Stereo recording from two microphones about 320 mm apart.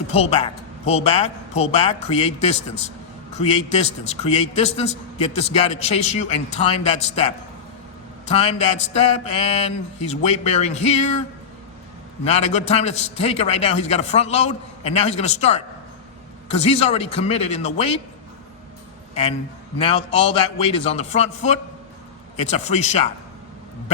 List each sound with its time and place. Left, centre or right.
0.1 s a man's voice: centre
12.2 s a man's voice: centre
19.8 s a man's voice: centre